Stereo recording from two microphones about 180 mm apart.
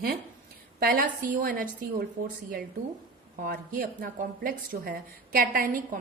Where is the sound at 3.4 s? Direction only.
55° right (ahead or behind).